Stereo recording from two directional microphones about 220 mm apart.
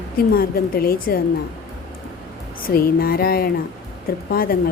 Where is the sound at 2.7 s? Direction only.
45° left (ahead or behind).